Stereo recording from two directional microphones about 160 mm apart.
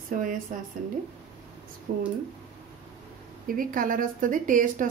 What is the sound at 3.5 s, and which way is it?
A woman's voice, 60° right (ahead or behind).